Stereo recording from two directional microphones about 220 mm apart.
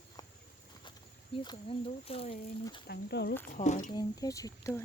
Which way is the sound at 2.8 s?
50° left (ahead or behind).